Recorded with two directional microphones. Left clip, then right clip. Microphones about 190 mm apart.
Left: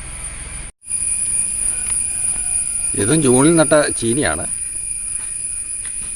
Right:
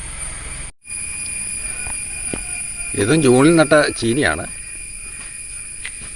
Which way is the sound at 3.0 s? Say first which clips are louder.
Right 1 dB; centre (ahead or behind).